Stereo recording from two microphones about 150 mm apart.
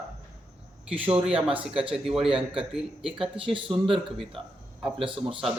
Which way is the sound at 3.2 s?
35° right (ahead or behind).